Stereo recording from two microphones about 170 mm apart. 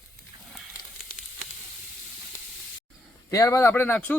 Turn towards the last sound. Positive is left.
turn(degrees=10)  # may be behind; listen again after turning